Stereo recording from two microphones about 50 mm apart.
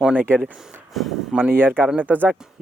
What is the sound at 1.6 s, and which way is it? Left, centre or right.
Speech, right.